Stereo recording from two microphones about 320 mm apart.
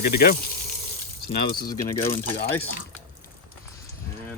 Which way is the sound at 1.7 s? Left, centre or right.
Centre.